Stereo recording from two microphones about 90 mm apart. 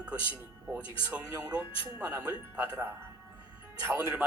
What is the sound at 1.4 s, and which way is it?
Speech, 20° right (ahead or behind).